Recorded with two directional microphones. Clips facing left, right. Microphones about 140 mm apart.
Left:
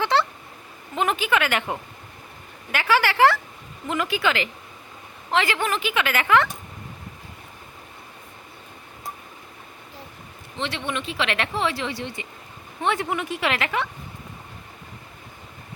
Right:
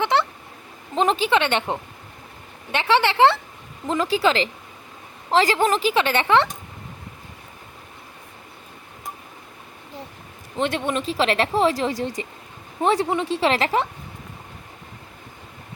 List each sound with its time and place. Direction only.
0.0 s a sound: 20° right (ahead or behind)
0.9 s a woman's voice: 30° right (ahead or behind)
10.6 s speech: 45° right (ahead or behind)